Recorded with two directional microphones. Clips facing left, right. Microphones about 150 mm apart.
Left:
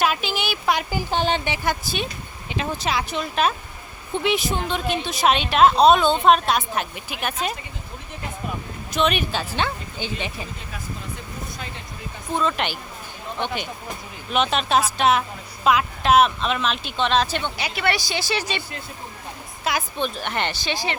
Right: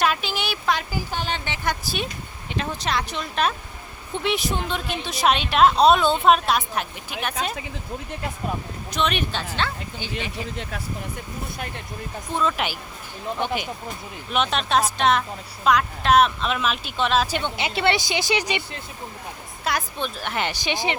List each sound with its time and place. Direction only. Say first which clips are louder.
0.0 s a sound: left 1 dB; centre (ahead or behind)
0.6 s speech: left 2 dB; 15° left (ahead or behind)
1.5 s a woman's voice: left 2 dB; 5° left (ahead or behind)
8.9 s a woman's voice: left 3 dB; 5° left (ahead or behind)
9.6 s speech: left 2 dB; 20° left (ahead or behind)
12.4 s a woman's voice: even; 5° right (ahead or behind)
19.6 s a woman's voice: left 2 dB; centre (ahead or behind)
20.5 s speech: right 1 dB; 15° right (ahead or behind)